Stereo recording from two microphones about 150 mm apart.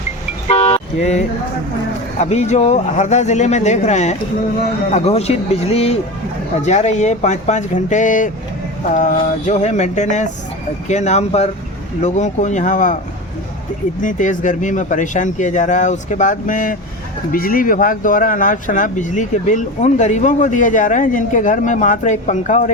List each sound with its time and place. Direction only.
0.4 s toot: 40° left (ahead or behind)
2.1 s speech: 50° left (ahead or behind)
14.0 s speech: 60° left (ahead or behind)
17.3 s speech: 75° left (ahead or behind); by 22.7 s 55° left (ahead or behind)